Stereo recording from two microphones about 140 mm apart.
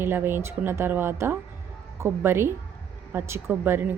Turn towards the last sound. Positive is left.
turn(degrees=-15)  # may be behind; listen again after turning